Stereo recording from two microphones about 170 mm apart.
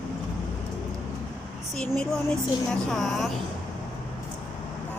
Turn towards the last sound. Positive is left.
turn(degrees=0)  # may be behind; listen again after turning